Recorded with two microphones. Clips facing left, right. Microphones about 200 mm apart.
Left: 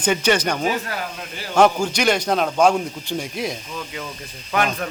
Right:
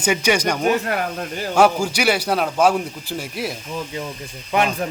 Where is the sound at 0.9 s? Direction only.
55° right (ahead or behind).